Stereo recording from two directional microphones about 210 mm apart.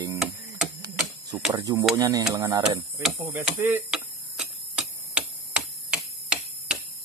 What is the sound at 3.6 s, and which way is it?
Tick-tock, 10° right (ahead or behind).